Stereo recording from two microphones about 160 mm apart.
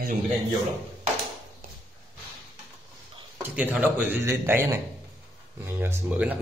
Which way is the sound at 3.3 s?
10° right (ahead or behind).